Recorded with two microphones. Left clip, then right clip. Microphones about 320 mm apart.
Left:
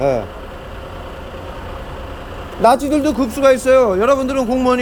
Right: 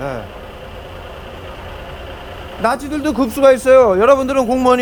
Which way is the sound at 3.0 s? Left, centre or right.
Centre.